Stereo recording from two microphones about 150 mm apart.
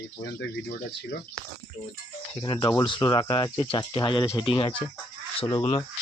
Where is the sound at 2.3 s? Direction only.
35° left (ahead or behind).